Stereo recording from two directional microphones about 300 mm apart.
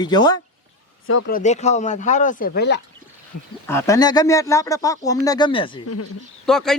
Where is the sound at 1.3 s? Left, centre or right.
Left.